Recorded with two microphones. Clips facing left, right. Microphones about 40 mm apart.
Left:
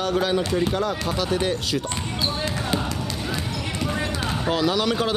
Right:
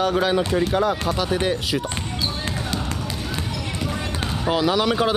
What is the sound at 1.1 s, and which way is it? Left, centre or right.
Speech, centre.